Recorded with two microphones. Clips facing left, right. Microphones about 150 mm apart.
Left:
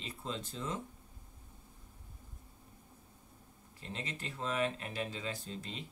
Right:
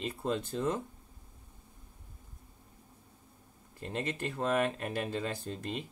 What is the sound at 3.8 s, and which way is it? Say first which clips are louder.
Speech: right 8 dB; 55° right (ahead or behind).